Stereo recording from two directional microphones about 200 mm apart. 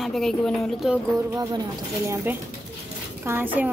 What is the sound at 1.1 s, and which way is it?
Speech, 20° right (ahead or behind).